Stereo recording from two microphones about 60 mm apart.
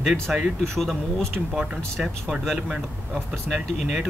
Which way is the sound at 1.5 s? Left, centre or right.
Centre.